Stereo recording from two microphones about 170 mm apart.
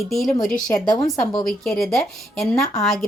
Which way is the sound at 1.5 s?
Centre (ahead or behind).